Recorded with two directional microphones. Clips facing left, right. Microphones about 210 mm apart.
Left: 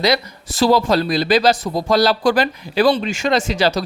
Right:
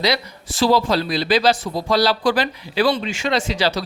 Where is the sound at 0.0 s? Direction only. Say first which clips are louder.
Left 3 dB; 45° left (ahead or behind).